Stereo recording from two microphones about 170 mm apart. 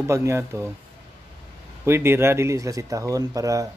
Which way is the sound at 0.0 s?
15° right (ahead or behind).